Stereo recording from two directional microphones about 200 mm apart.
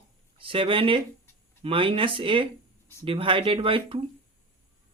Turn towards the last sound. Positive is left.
turn(degrees=-25)  # may be behind; listen again after turning